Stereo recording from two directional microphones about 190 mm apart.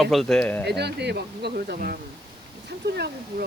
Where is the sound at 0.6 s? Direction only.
60° right (ahead or behind).